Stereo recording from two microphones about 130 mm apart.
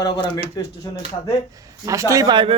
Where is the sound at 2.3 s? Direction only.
40° right (ahead or behind).